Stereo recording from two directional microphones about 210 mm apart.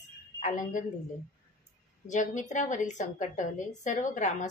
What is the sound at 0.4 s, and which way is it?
Speech, 35° left (ahead or behind).